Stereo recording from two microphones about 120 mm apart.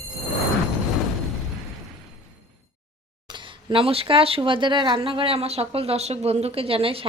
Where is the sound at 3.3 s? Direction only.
45° right (ahead or behind).